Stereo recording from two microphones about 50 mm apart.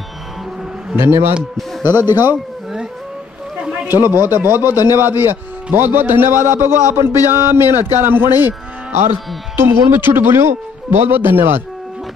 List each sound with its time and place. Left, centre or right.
0.9 s speech: right
1.8 s speech: right
3.8 s speech: right
9.6 s speech: right